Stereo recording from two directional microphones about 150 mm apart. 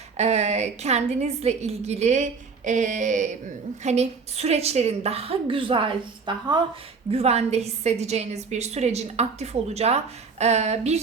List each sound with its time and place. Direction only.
0.2 s a woman's voice: 50° right (ahead or behind)
7.1 s a woman's voice: 45° right (ahead or behind)